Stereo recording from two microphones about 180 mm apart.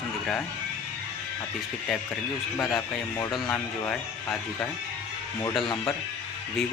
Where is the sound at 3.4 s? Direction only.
5° left (ahead or behind).